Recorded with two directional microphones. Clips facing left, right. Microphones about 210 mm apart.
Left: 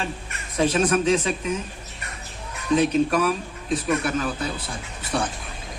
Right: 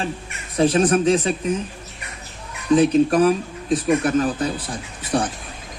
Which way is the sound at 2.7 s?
35° right (ahead or behind).